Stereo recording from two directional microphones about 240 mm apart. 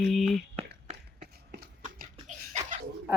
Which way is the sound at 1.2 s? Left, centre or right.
Right.